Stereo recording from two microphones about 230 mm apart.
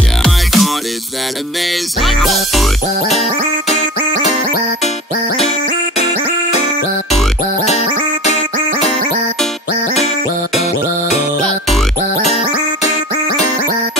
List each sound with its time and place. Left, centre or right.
0.2 s music: centre
2.0 s music: centre